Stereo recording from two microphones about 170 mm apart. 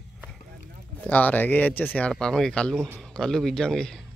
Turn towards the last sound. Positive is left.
turn(degrees=5)  # may be behind; listen again after turning